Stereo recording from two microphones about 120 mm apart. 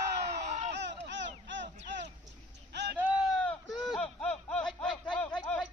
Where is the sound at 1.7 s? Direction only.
80° right.